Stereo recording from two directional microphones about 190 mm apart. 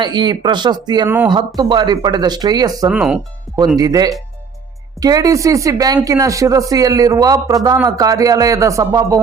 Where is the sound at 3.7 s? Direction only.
20° right (ahead or behind).